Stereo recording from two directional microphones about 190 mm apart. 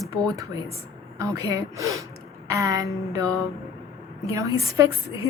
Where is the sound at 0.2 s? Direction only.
15° right (ahead or behind).